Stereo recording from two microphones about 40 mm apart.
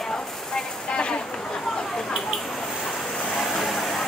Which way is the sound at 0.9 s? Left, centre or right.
Left.